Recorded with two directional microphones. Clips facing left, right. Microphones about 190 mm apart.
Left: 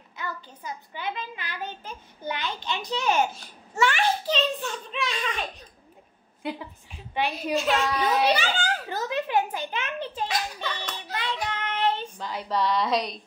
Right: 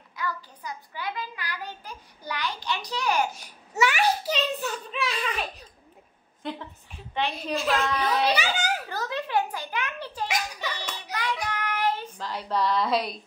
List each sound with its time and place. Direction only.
0.1 s a child's voice: 25° left (ahead or behind)
3.3 s a child's voice: 10° right (ahead or behind)
7.2 s a child's voice: 10° left (ahead or behind)
8.0 s a child's voice: 15° left (ahead or behind)
8.8 s a sound: 20° left (ahead or behind)
10.2 s a sound: 15° right (ahead or behind)
11.1 s child singing: 25° left (ahead or behind)
12.2 s a child's voice: centre (ahead or behind)